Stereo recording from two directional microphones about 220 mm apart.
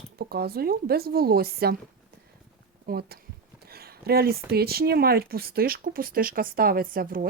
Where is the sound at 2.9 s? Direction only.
45° right (ahead or behind).